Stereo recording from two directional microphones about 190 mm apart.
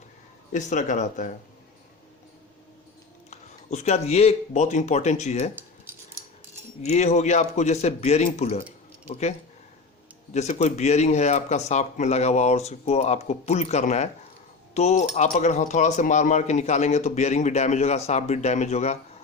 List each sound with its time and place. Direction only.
0.5 s speech: 40° left (ahead or behind)
3.2 s speech: 35° left (ahead or behind)
6.8 s speech: 35° left (ahead or behind)
10.3 s speech: 35° left (ahead or behind)